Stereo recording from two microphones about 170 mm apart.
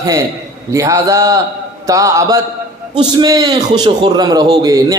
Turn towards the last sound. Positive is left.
turn(degrees=-20)  # may be behind; listen again after turning